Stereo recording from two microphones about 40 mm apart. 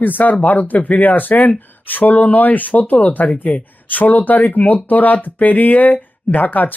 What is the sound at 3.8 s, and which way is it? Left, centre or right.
Speech, left.